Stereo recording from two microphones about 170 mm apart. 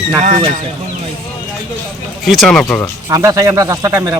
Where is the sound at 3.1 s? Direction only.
20° right (ahead or behind).